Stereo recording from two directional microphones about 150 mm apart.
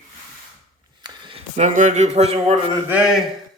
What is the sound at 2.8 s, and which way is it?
Speech, 5° right (ahead or behind).